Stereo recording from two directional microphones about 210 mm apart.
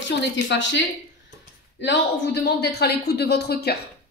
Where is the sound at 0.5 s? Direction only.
60° left (ahead or behind).